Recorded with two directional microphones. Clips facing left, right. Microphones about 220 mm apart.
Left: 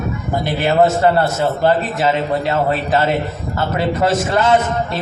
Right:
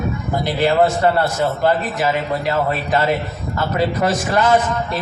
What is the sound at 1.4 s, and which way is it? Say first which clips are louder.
A man's voice: left 2 dB; 25° left (ahead or behind).